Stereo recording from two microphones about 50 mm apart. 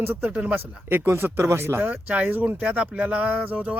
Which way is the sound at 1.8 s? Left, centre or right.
Right.